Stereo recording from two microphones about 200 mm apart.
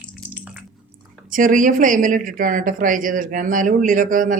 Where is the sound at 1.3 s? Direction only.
40° right (ahead or behind).